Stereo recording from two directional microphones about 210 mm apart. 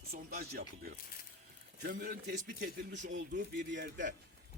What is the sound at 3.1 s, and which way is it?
Speech, 60° right (ahead or behind).